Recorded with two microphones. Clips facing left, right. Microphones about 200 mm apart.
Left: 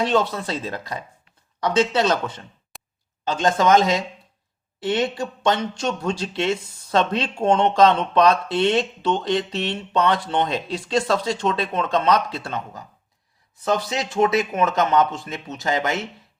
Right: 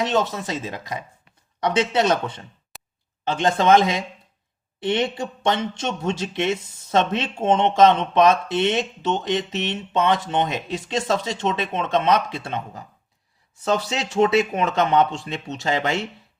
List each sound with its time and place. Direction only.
0.0 s speech: 20° right (ahead or behind)
2.7 s a sound: centre (ahead or behind)
3.2 s speech: 25° right (ahead or behind)
14.2 s speech: 30° right (ahead or behind)